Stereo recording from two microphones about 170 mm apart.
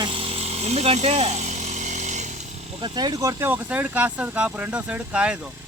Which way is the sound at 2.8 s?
25° right (ahead or behind).